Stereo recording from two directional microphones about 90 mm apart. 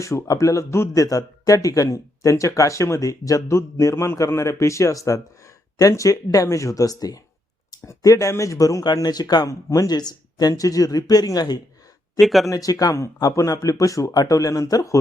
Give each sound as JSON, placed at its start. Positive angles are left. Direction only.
{"t": 0.0, "sound": "a man's voice", "side_deg": 35}
{"t": 12.2, "sound": "speech", "side_deg": 0}
{"t": 12.5, "sound": "a man's voice", "side_deg": 40}